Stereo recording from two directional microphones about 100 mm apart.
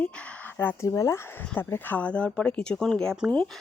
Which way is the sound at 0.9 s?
30° left (ahead or behind).